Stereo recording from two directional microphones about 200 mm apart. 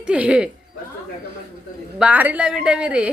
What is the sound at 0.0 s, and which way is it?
Speech, 5° right (ahead or behind).